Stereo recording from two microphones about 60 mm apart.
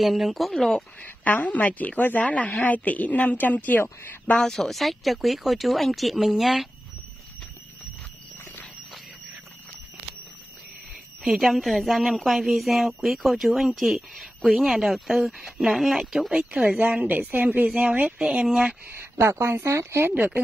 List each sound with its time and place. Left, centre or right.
0.0 s speech: centre
1.0 s a woman's voice: left
3.8 s speech: left
4.4 s speech: centre
11.2 s speech: centre
17.1 s speech: right
17.6 s speech: centre
18.9 s speech: right